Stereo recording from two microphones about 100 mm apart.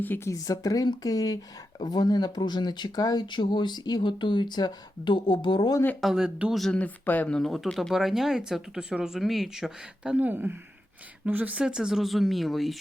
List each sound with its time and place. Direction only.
0.3 s speech: 35° left (ahead or behind)
6.0 s speech: 5° right (ahead or behind)
6.7 s speech: 15° left (ahead or behind)
7.3 s speech: 5° left (ahead or behind)